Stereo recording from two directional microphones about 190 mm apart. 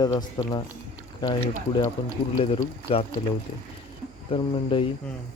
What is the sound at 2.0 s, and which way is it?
Speech, 25° left (ahead or behind).